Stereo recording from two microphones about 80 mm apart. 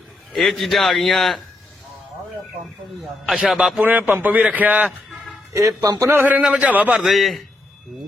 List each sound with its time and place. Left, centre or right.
0.3 s a man's voice: centre
3.5 s a man's voice: centre
3.8 s a man's voice: right
5.5 s a man's voice: right
6.1 s a man's voice: right
7.0 s a man's voice: centre